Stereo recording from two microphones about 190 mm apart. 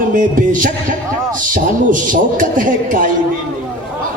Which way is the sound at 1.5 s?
45° right (ahead or behind).